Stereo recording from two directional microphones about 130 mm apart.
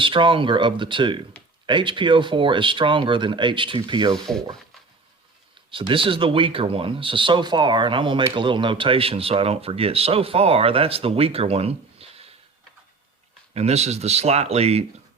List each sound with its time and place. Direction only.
0.0 s speech: 40° right (ahead or behind)
4.1 s speech: 5° left (ahead or behind)
5.7 s speech: 40° right (ahead or behind)
13.5 s speech: 55° right (ahead or behind)